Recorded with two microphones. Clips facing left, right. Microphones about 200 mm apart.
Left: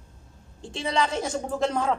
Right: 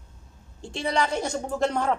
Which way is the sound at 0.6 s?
Centre (ahead or behind).